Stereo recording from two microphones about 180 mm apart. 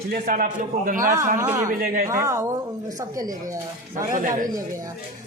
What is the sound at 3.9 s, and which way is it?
Speech, 50° right (ahead or behind).